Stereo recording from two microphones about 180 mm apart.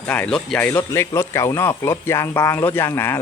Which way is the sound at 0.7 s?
15° left (ahead or behind).